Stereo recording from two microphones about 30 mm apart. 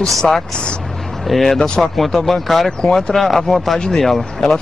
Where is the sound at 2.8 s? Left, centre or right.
Left.